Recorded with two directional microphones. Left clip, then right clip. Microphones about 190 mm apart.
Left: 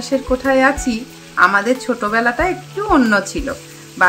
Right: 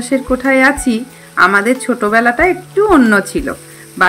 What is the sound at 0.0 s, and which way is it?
Speech, 15° right (ahead or behind).